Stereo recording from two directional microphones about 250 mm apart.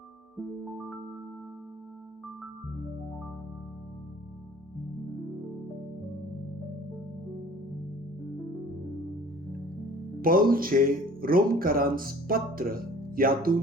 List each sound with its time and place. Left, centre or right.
10.2 s speech: right